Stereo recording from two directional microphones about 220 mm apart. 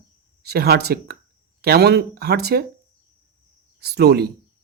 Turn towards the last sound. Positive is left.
turn(degrees=-45)  # may be behind; listen again after turning